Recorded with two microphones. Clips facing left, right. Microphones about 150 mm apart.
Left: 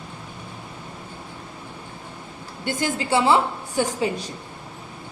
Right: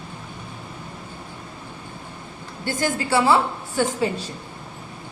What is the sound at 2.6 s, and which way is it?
A woman's voice, 20° left (ahead or behind).